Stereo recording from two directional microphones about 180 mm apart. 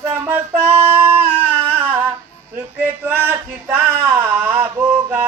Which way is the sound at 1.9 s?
10° right (ahead or behind).